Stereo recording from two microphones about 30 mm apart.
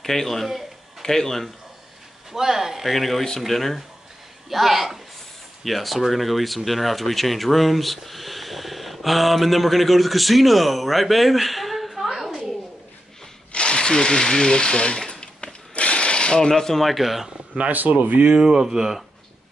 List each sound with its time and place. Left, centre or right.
0.0 s a man's voice: centre
0.5 s a sound: centre
1.0 s speech: centre
2.3 s speech: centre
2.9 s speech: centre
13.5 s sewing machine: left
15.7 s a sound: left
16.3 s speech: centre
16.8 s speech: centre
17.6 s speech: right
18.4 s speech: right